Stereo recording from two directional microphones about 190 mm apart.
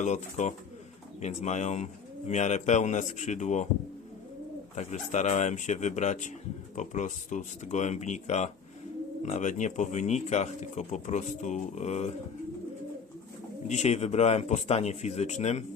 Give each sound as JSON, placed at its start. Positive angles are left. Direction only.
{"t": 0.0, "sound": "speech", "side_deg": 40}
{"t": 4.7, "sound": "speech", "side_deg": 35}
{"t": 13.7, "sound": "speech", "side_deg": 35}